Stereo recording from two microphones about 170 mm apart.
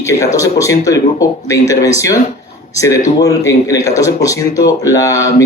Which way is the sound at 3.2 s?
20° left (ahead or behind).